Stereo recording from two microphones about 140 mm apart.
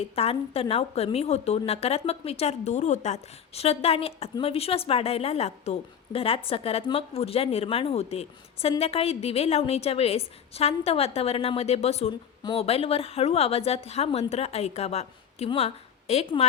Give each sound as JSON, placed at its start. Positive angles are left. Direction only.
{"t": 0.2, "sound": "a woman's voice", "side_deg": 45}